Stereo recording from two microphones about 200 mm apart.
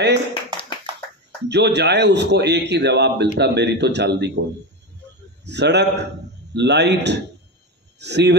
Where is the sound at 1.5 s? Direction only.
60° right (ahead or behind).